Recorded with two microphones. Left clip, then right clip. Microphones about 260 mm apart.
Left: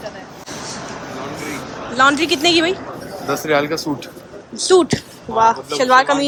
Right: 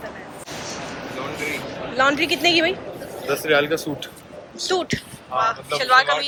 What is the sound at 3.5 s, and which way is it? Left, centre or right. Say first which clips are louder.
Speech: left 1 dB; left.